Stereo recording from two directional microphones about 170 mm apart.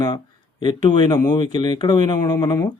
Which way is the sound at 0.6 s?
25° left (ahead or behind).